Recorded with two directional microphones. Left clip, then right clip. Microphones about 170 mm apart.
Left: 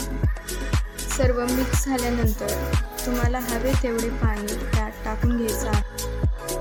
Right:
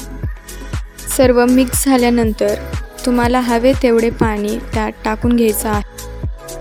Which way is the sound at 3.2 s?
50° right (ahead or behind).